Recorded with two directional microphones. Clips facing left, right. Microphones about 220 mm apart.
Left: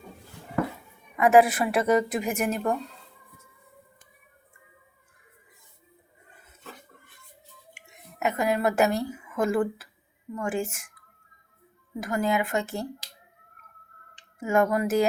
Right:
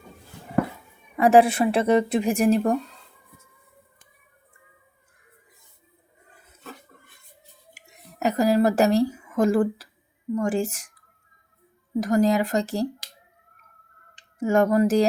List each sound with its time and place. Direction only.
1.1 s speech: 30° right (ahead or behind)
7.7 s a sound: 40° right (ahead or behind)
10.3 s speech: 35° right (ahead or behind)
11.9 s speech: 35° right (ahead or behind)
14.3 s speech: 35° right (ahead or behind)